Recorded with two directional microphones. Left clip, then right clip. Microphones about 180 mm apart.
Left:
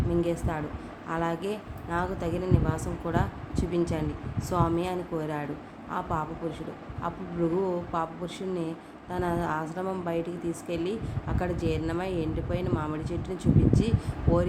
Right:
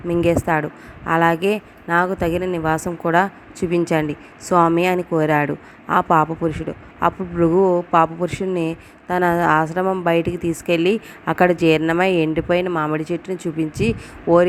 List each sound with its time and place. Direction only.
0.1 s speech: 50° right (ahead or behind)
7.6 s speech: 50° right (ahead or behind)